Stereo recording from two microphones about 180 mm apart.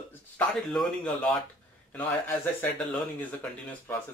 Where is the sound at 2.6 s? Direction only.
10° left (ahead or behind).